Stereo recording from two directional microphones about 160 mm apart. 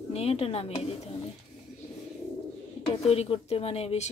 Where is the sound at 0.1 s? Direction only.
40° left (ahead or behind).